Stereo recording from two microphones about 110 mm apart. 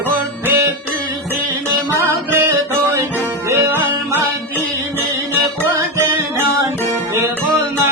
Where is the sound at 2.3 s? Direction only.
20° right (ahead or behind).